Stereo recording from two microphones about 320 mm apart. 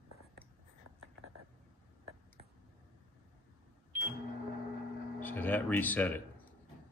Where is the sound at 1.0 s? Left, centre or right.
Right.